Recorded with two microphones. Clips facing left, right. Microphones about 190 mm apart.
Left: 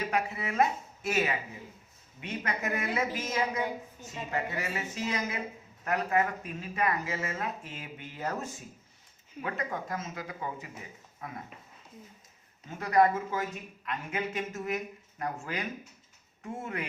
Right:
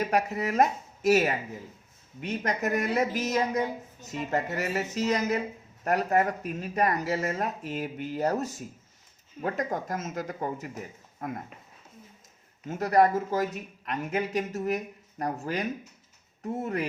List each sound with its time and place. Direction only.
0.0 s speech: 40° right (ahead or behind)
12.6 s speech: 40° right (ahead or behind)